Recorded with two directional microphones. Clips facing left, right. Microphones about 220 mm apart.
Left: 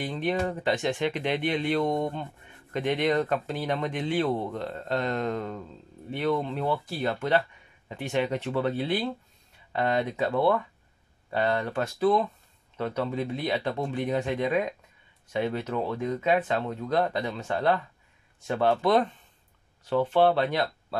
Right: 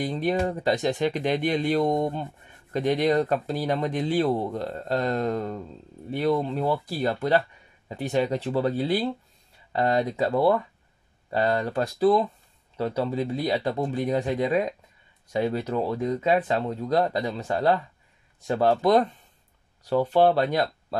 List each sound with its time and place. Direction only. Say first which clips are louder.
0.0 s speech: right 3 dB; 35° right (ahead or behind)